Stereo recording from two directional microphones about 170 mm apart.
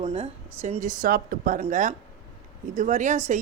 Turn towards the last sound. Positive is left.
turn(degrees=-45)  # may be behind; listen again after turning